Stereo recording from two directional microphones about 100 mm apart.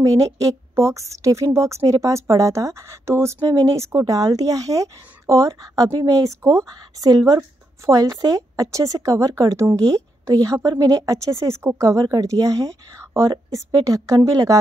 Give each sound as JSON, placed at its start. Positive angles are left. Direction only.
{"t": 0.0, "sound": "a woman's voice", "side_deg": -35}